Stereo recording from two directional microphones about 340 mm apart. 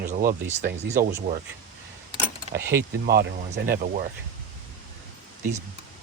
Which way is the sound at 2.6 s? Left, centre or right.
Centre.